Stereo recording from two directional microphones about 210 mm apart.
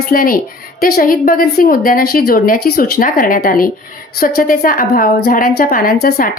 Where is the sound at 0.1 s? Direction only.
45° left (ahead or behind).